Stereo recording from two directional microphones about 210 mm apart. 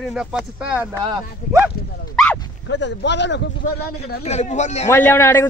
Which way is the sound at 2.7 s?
55° left (ahead or behind).